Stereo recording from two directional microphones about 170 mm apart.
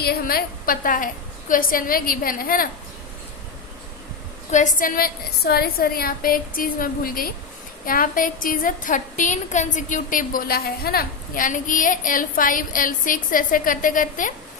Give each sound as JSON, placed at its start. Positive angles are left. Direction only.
{"t": 0.0, "sound": "a woman's voice", "side_deg": 65}
{"t": 4.5, "sound": "a woman's voice", "side_deg": 50}